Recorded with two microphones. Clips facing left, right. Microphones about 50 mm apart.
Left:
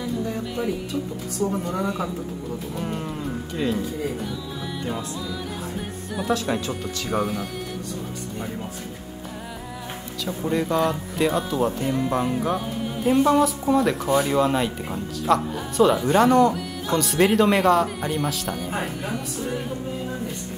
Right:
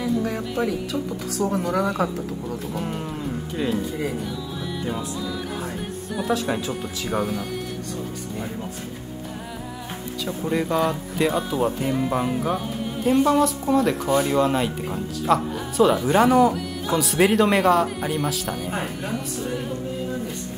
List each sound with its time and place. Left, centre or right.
0.9 s a woman's voice: centre
1.4 s speech: right
2.7 s speech: centre
4.8 s speech: centre
10.2 s speech: centre